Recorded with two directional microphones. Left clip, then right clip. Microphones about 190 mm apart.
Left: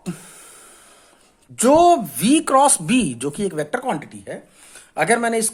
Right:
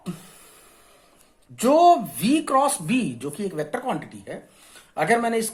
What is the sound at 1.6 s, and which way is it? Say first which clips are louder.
Speech: left 3 dB; 40° left (ahead or behind).